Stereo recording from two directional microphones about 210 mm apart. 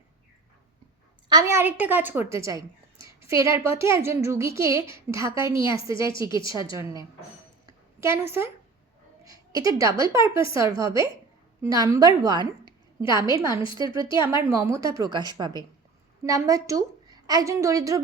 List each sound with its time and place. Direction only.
1.3 s a woman's voice: 15° right (ahead or behind)
8.0 s a woman's voice: 10° right (ahead or behind)
13.0 s a woman's voice: 20° left (ahead or behind)
13.3 s a woman's voice: 15° right (ahead or behind)